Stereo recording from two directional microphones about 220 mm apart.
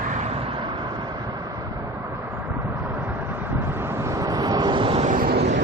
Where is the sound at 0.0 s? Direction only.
30° right (ahead or behind).